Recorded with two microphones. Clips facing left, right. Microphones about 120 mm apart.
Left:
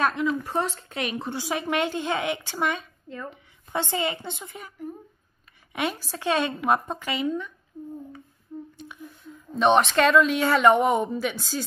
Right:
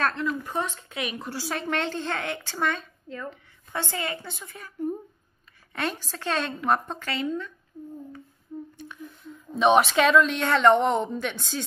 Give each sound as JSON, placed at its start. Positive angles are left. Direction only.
{"t": 0.0, "sound": "a woman's voice", "side_deg": 15}
{"t": 0.5, "sound": "speech", "side_deg": 30}
{"t": 1.4, "sound": "a woman's voice", "side_deg": 15}
{"t": 7.7, "sound": "a sound", "side_deg": 25}
{"t": 8.5, "sound": "humming", "side_deg": 0}
{"t": 9.0, "sound": "a woman's voice", "side_deg": 0}